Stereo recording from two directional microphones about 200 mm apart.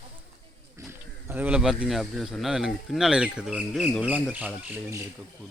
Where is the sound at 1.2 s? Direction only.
10° right (ahead or behind).